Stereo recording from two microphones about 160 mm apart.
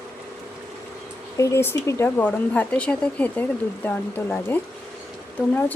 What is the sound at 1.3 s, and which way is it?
Speech, 20° left (ahead or behind).